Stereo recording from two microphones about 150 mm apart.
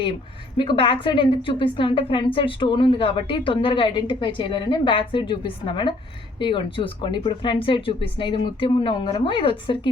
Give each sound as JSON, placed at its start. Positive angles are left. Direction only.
{"t": 0.5, "sound": "a woman's voice", "side_deg": 35}